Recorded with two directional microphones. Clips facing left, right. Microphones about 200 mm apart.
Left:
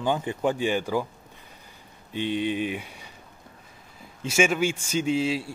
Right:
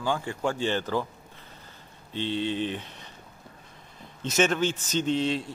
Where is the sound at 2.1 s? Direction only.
15° left (ahead or behind).